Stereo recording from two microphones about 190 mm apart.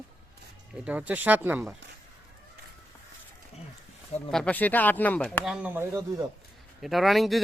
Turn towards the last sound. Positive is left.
turn(degrees=0)  # may be behind; listen again after turning